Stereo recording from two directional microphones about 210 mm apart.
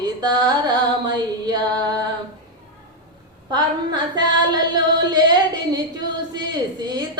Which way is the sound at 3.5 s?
20° right (ahead or behind).